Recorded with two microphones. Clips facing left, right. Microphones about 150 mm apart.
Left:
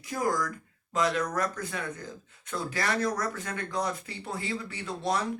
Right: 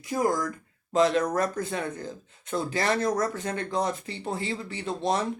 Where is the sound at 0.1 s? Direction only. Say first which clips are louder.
Right 3 dB; 25° right (ahead or behind).